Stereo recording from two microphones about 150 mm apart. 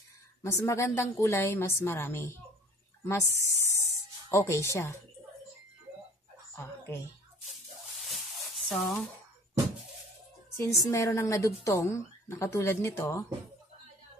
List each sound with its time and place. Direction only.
0.4 s a woman's voice: 20° left (ahead or behind)
6.5 s a sound: 15° left (ahead or behind)
8.6 s speech: 5° left (ahead or behind)
10.5 s a woman's voice: 20° left (ahead or behind)